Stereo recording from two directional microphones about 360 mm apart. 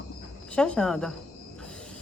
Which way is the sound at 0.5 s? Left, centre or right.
Centre.